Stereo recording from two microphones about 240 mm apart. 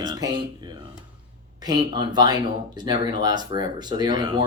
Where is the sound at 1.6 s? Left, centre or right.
Centre.